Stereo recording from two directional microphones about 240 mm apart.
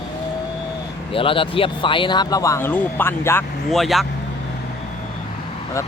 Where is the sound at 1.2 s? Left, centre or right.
Left; by 4.1 s centre.